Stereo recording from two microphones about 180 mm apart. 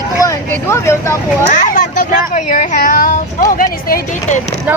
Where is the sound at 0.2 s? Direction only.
15° left (ahead or behind).